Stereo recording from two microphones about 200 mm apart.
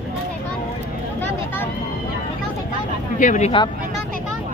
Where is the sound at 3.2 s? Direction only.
35° left (ahead or behind).